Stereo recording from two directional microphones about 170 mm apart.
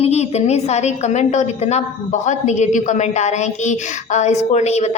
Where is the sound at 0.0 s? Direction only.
40° left (ahead or behind).